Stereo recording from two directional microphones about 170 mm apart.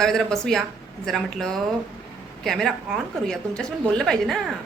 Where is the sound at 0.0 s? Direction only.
5° left (ahead or behind).